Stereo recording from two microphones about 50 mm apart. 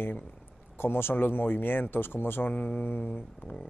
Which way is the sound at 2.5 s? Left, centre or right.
Left.